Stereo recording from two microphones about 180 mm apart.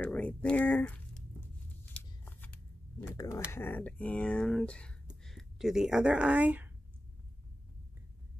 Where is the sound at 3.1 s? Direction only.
15° left (ahead or behind); by 6.7 s 10° right (ahead or behind).